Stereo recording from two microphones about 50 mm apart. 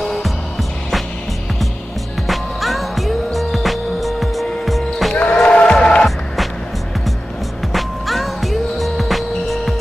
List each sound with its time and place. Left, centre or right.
0.0 s music: centre
2.2 s music: centre
5.1 s music: left; by 6.0 s centre
6.0 s music: centre
7.7 s music: centre